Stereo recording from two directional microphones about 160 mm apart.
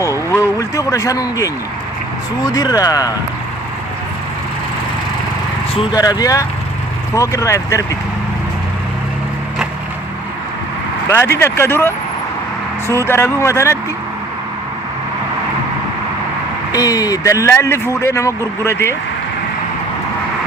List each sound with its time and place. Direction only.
0.3 s a sound: 20° left (ahead or behind)
2.5 s speech: 25° left (ahead or behind)
5.9 s speech: 25° left (ahead or behind)
11.1 s speech: 15° left (ahead or behind)
16.7 s speech: 20° left (ahead or behind)